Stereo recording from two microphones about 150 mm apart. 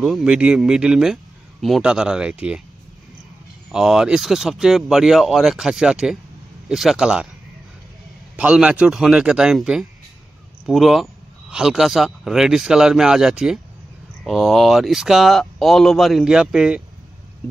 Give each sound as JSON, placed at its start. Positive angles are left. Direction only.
{"t": 0.0, "sound": "speech", "side_deg": -5}
{"t": 3.7, "sound": "speech", "side_deg": -5}
{"t": 8.4, "sound": "speech", "side_deg": -5}